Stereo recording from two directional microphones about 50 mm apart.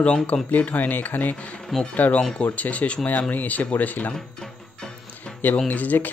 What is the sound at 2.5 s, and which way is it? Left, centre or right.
Speech, left.